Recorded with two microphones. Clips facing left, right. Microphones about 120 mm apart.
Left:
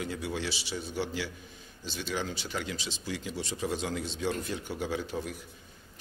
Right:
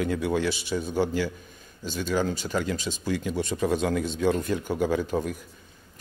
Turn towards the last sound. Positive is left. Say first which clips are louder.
# right 8 dB
turn(degrees=-50)  # may be behind; listen again after turning